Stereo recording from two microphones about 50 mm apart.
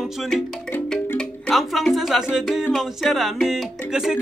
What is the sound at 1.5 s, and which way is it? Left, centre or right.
Speech, centre.